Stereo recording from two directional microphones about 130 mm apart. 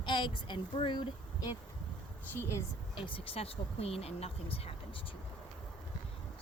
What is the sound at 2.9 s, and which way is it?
Speech, 40° left (ahead or behind).